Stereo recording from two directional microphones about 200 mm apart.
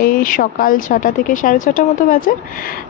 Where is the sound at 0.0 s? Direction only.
40° left (ahead or behind).